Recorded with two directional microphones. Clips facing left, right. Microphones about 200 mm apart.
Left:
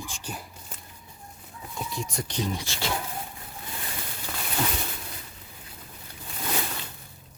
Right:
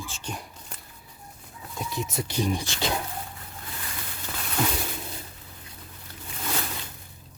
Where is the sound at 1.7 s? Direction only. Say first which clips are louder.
Right 2 dB; centre (ahead or behind); by 2.9 s 15° right (ahead or behind).